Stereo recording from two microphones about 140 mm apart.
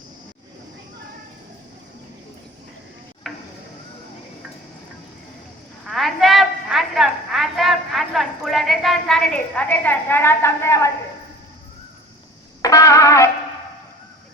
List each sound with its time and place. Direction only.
3.3 s a sound: centre (ahead or behind)
5.8 s a woman's voice: centre (ahead or behind); by 10.9 s 20° left (ahead or behind)
12.6 s music: 25° left (ahead or behind)